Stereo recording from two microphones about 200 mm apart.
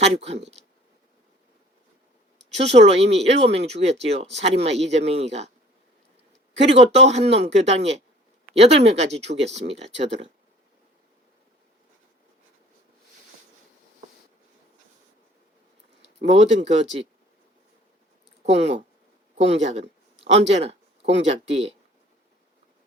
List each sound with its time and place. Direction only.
0.0 s speech: 30° right (ahead or behind)
2.6 s speech: 30° right (ahead or behind)
6.7 s speech: 35° right (ahead or behind)
16.2 s speech: 35° right (ahead or behind)
18.4 s speech: 35° right (ahead or behind)